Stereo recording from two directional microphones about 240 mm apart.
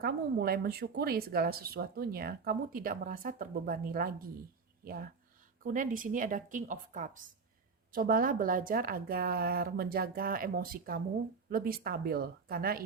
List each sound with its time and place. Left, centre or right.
0.0 s speech: right
5.6 s speech: right